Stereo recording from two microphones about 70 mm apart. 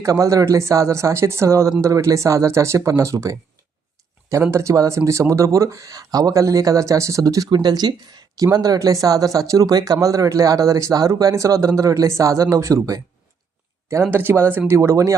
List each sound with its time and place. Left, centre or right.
0.0 s speech: right
7.5 s speech: right
8.5 s speech: right
13.8 s speech: right